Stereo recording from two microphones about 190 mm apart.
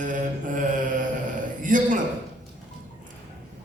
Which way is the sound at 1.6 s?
45° right (ahead or behind).